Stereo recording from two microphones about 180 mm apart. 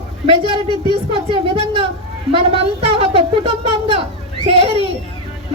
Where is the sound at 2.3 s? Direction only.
30° right (ahead or behind).